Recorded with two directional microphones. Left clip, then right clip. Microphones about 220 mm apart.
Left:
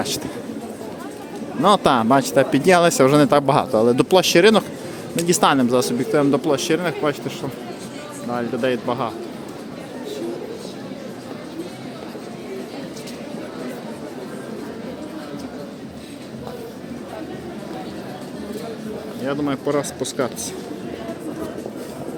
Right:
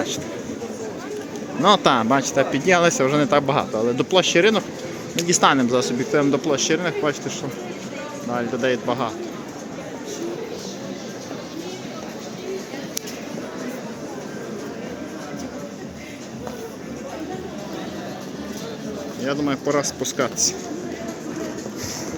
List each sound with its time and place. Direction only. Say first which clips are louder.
1.6 s speech: left 1 dB; 15° left (ahead or behind)
5.2 s speech: even; 15° left (ahead or behind)
19.2 s speech: even; 10° left (ahead or behind)